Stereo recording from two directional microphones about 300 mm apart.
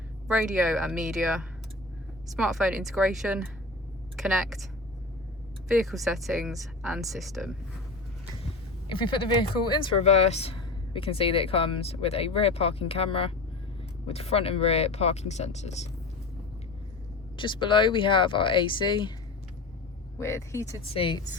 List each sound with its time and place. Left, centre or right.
0.3 s speech: centre
2.3 s speech: centre
8.9 s speech: centre
17.3 s speech: centre
20.1 s speech: centre